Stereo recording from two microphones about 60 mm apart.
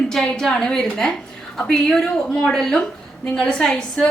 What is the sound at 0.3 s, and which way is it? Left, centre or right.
A woman's voice, centre.